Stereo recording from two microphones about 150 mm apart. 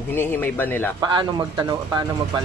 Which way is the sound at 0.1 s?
15° left (ahead or behind).